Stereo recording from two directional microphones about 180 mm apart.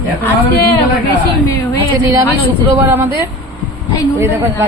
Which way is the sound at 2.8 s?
15° right (ahead or behind).